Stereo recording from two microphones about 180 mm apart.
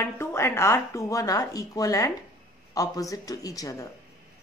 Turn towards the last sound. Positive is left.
turn(degrees=20)  # may be behind; listen again after turning